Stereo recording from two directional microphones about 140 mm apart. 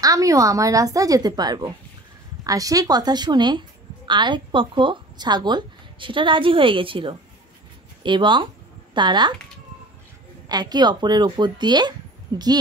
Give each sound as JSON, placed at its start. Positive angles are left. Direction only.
{"t": 0.0, "sound": "a woman's voice", "side_deg": -25}
{"t": 10.5, "sound": "a woman's voice", "side_deg": -30}